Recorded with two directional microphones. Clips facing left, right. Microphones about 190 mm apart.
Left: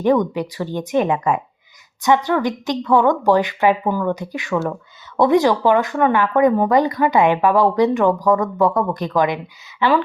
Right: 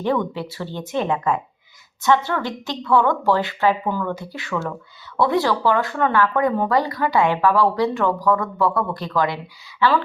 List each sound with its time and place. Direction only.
0.3 s speech: 15° left (ahead or behind)